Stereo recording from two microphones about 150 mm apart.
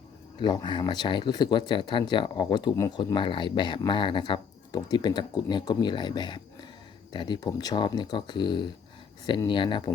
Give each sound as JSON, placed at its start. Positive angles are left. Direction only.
{"t": 0.3, "sound": "speech", "side_deg": 30}